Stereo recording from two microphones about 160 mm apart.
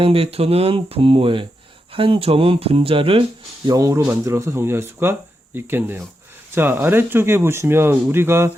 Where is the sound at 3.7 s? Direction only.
20° right (ahead or behind).